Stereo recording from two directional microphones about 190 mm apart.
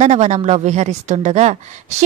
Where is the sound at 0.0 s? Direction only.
35° right (ahead or behind).